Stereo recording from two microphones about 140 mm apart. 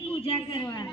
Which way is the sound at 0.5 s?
30° left (ahead or behind).